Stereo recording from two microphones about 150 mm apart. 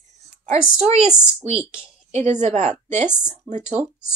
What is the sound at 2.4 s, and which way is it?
Speech, 50° right (ahead or behind).